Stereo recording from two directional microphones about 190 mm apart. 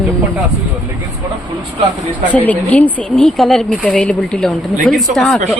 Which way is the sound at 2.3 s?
10° left (ahead or behind).